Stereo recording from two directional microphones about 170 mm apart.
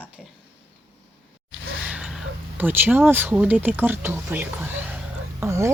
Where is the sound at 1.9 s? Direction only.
5° right (ahead or behind).